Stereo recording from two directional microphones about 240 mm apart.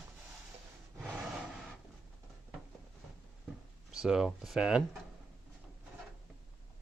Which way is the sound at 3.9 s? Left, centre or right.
Centre.